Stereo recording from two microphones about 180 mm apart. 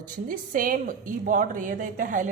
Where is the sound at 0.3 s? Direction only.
50° right (ahead or behind).